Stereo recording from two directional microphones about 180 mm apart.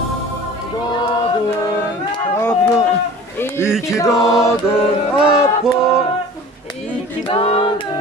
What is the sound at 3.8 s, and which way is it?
Music, 15° left (ahead or behind).